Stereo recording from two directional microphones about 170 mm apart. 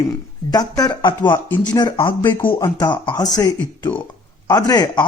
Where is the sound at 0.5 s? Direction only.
25° left (ahead or behind).